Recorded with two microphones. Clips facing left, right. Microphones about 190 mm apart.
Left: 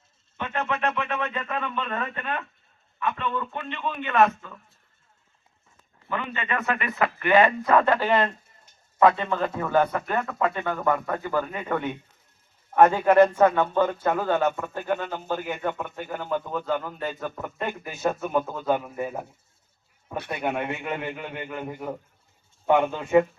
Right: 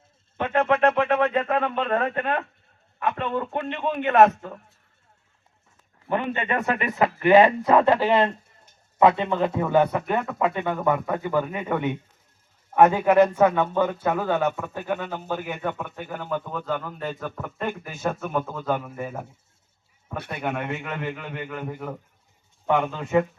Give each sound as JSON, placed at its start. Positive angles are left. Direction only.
{"t": 1.0, "sound": "a man's voice", "side_deg": -35}
{"t": 6.1, "sound": "a man's voice", "side_deg": -50}
{"t": 6.9, "sound": "a man's voice", "side_deg": -25}
{"t": 8.0, "sound": "speech", "side_deg": -25}
{"t": 8.3, "sound": "a sound", "side_deg": -65}
{"t": 9.0, "sound": "a man's voice", "side_deg": -20}
{"t": 20.3, "sound": "a man's voice", "side_deg": 20}